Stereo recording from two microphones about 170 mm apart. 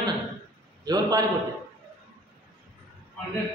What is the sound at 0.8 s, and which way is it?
Speech, 25° right (ahead or behind).